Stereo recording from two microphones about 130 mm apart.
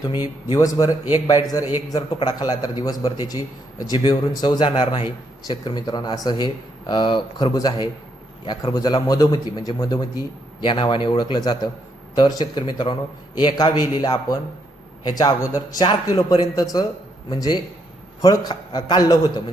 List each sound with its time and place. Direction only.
0.5 s a man's voice: 25° left (ahead or behind)